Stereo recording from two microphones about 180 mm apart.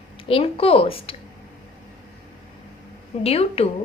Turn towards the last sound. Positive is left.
turn(degrees=35)  # may be behind; listen again after turning